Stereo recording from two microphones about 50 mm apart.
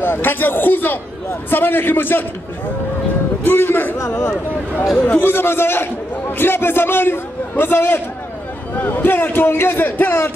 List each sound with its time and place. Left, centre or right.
0.0 s a man's voice: left
3.4 s a man's voice: left
5.0 s a man's voice: left
8.7 s a man's voice: left